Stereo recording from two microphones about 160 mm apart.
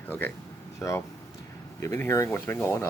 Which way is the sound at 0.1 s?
10° left (ahead or behind).